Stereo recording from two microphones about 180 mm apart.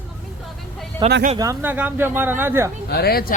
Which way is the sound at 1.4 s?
15° right (ahead or behind).